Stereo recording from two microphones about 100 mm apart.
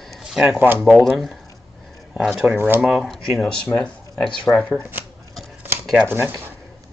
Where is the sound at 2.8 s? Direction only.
Centre (ahead or behind).